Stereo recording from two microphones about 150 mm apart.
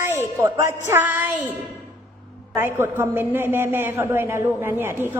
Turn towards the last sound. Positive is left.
turn(degrees=-15)  # may be behind; listen again after turning